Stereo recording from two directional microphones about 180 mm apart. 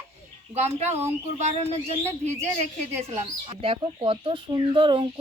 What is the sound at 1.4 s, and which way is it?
Speech, 35° right (ahead or behind).